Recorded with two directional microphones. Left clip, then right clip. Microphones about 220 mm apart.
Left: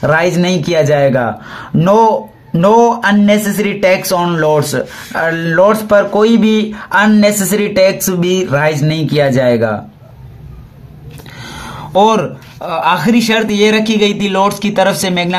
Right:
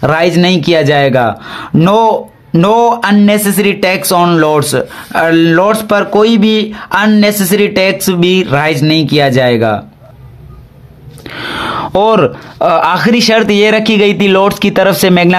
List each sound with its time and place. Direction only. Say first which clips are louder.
0.0 s speech: right 2 dB; 40° right (ahead or behind)
6.1 s speech: right 2 dB; 30° right (ahead or behind)
7.4 s speech: right 1 dB; 45° right (ahead or behind)
11.3 s speech: right 12 dB; 35° right (ahead or behind)